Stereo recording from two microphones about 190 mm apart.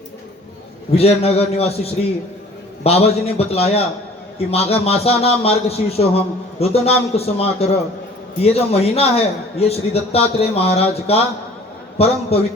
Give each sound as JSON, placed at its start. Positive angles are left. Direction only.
{"t": 0.9, "sound": "a man's voice", "side_deg": 30}